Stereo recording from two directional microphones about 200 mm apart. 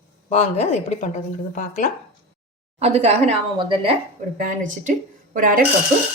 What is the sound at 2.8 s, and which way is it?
A woman's voice, 30° right (ahead or behind).